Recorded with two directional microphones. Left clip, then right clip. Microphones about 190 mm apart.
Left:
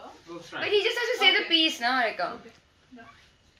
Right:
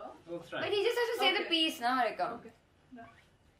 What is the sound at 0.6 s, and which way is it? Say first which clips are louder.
A woman's voice: left 6 dB; 30° left (ahead or behind).